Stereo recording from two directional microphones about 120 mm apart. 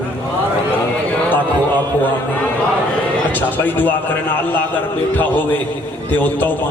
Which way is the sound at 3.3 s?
15° left (ahead or behind).